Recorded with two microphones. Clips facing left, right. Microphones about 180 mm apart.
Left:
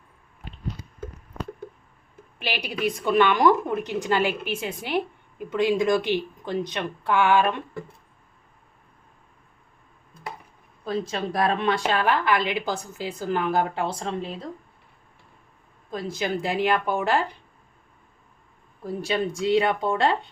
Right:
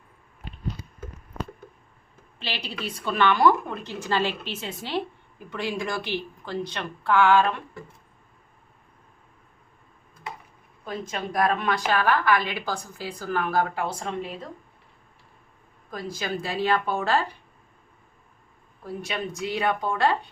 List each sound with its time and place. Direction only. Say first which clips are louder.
2.4 s a woman's voice: left 6 dB; 15° left (ahead or behind)
10.8 s a woman's voice: left 4 dB; 30° left (ahead or behind)
15.9 s a woman's voice: left 3 dB; 25° left (ahead or behind)
19.0 s a woman's voice: left 7 dB; 30° left (ahead or behind)